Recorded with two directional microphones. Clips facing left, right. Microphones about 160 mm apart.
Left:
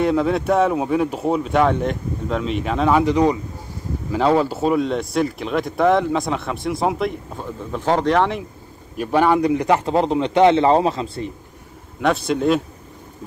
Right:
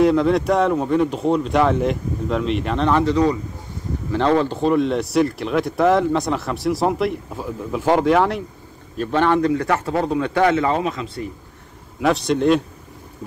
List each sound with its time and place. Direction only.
0.0 s speech: 5° left (ahead or behind)
8.9 s speech: 10° left (ahead or behind); by 11.3 s 25° left (ahead or behind)
12.0 s speech: centre (ahead or behind)